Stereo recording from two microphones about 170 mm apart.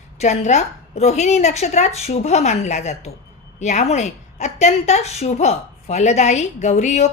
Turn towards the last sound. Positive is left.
turn(degrees=45)  # may be behind; listen again after turning